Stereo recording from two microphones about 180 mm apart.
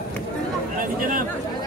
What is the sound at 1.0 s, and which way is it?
Chatter, 50° right (ahead or behind).